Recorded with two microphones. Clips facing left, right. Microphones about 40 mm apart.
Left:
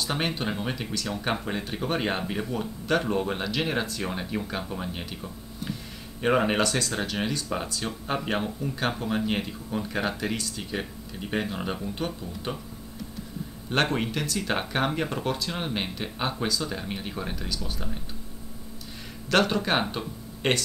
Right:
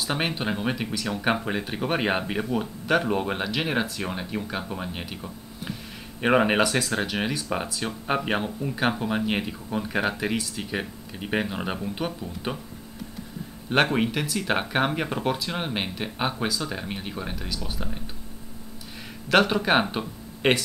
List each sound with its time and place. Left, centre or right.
0.0 s speech: centre
13.9 s speech: centre
19.2 s speech: centre